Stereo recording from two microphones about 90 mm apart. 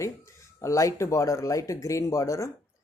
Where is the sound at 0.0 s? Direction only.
35° left (ahead or behind).